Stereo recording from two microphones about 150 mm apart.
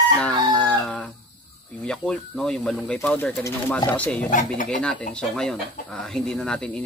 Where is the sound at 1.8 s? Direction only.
5° left (ahead or behind).